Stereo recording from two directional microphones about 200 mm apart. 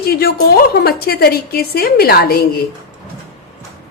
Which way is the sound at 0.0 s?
50° left (ahead or behind).